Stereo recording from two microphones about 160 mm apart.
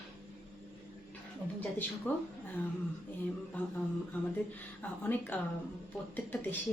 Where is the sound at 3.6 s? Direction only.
10° left (ahead or behind).